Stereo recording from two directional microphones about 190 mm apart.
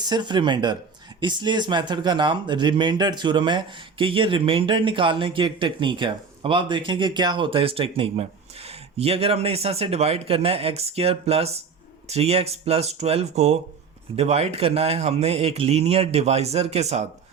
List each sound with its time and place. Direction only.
0.0 s speech: 25° right (ahead or behind)